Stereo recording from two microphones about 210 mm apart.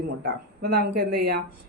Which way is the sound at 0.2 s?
50° right (ahead or behind).